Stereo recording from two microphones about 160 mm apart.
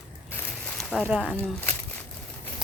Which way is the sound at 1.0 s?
10° right (ahead or behind).